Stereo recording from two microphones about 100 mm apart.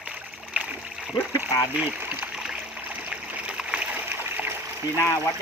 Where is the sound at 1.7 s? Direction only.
10° right (ahead or behind).